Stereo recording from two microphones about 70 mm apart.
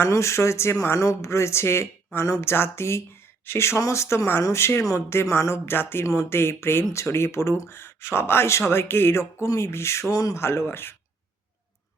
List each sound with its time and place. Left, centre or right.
0.0 s speech: left
10.1 s speech: left
10.3 s speech: left